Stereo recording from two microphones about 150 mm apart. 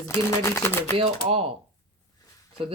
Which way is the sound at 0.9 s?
40° right (ahead or behind).